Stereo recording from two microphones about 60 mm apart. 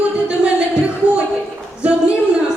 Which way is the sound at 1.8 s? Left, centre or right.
Centre.